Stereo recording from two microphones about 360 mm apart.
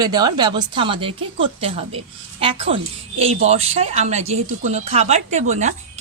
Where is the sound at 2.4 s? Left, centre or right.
Centre.